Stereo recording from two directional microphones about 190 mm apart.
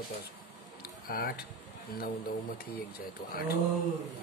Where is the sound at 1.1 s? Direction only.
50° left (ahead or behind).